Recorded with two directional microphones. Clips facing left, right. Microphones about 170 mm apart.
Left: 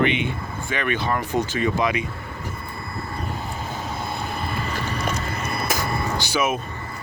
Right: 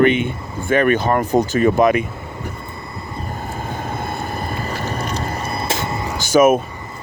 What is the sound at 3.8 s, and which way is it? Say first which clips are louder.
Vehicle: right 3 dB; 50° right (ahead or behind).